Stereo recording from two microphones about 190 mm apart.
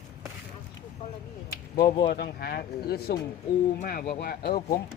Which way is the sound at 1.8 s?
25° left (ahead or behind).